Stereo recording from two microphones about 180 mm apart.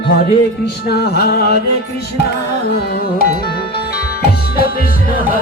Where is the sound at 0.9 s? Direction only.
65° left (ahead or behind).